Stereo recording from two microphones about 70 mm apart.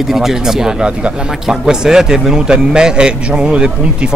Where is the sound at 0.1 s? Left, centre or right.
Centre.